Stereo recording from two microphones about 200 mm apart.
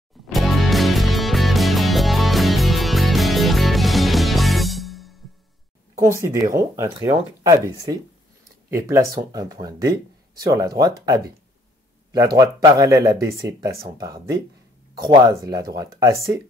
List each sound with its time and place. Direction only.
0.3 s music: centre (ahead or behind)
5.9 s speech: 15° right (ahead or behind)
12.4 s speech: 20° right (ahead or behind)